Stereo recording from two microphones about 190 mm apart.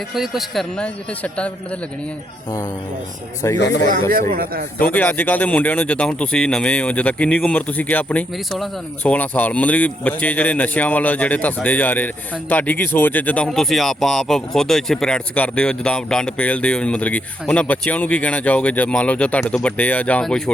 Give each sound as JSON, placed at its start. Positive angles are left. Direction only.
{"t": 0.1, "sound": "a man's voice", "side_deg": 0}
{"t": 3.4, "sound": "speech", "side_deg": 15}
{"t": 4.1, "sound": "speech", "side_deg": -50}
{"t": 4.9, "sound": "speech", "side_deg": 10}